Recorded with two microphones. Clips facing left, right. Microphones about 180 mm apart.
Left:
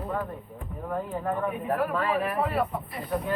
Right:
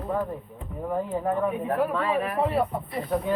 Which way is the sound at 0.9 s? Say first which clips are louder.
Right 3 dB; 10° right (ahead or behind).